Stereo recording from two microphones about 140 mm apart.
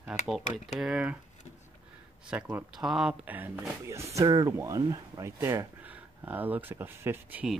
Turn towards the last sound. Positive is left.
turn(degrees=-15)  # may be behind; listen again after turning